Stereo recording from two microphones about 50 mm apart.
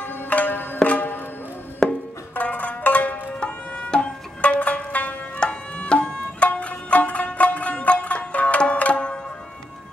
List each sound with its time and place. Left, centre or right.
0.0 s music: left
1.8 s music: centre
2.3 s zither: left
3.3 s music: left
5.4 s music: centre